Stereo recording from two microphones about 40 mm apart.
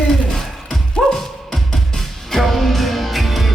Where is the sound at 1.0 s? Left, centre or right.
Centre.